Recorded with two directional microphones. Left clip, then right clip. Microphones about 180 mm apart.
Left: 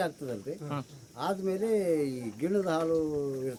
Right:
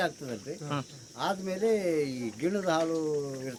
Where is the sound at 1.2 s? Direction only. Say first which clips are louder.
Right 1 dB; 70° left (ahead or behind).